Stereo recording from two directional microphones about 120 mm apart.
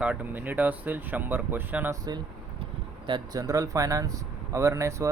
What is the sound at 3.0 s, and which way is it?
Speech, 35° right (ahead or behind).